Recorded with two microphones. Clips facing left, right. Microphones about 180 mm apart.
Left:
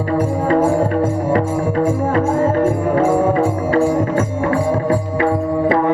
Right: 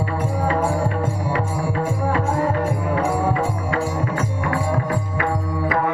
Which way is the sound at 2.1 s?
40° left (ahead or behind).